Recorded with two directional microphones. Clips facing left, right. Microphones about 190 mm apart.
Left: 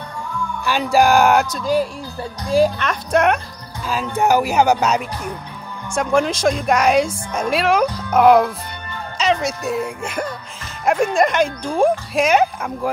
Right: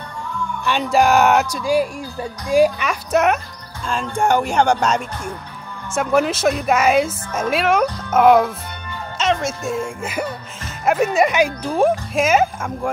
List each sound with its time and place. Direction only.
0.7 s speech: centre (ahead or behind)